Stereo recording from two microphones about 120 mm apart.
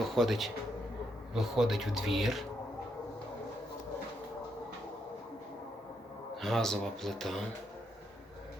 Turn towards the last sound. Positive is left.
turn(degrees=5)  # may be behind; listen again after turning